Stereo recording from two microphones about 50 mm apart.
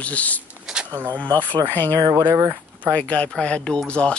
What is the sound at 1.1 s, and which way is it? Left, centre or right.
Speech, left.